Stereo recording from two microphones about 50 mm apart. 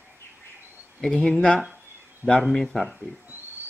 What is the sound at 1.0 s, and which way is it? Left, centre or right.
Speech, centre.